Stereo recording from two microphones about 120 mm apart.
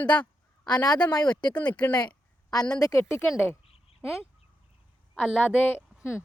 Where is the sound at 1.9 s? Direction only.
35° left (ahead or behind).